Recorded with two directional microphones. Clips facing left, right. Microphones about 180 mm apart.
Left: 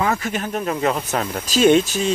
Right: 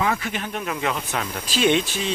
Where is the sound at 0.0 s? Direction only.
40° left (ahead or behind).